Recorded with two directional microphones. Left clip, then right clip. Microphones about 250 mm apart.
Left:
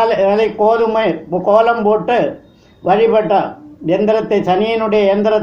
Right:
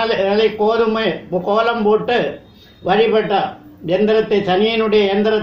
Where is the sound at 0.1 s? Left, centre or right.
Left.